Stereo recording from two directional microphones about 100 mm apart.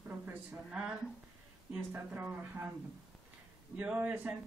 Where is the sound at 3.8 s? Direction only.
15° right (ahead or behind).